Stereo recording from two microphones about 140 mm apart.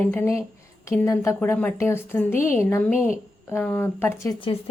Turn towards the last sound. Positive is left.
turn(degrees=40)  # may be behind; listen again after turning